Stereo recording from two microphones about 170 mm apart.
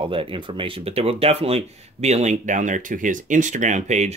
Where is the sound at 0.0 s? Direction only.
30° right (ahead or behind).